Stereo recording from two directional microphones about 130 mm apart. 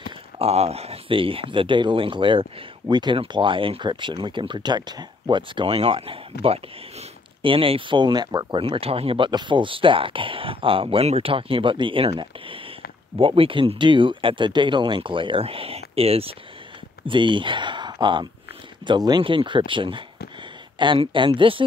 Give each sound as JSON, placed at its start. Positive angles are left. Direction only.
{"t": 0.4, "sound": "speech", "side_deg": -50}
{"t": 17.0, "sound": "speech", "side_deg": -40}